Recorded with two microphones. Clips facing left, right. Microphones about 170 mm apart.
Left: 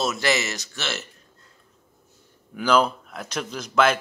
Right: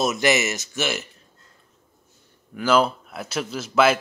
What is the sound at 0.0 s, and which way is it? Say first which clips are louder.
Speech: right 3 dB; 20° right (ahead or behind).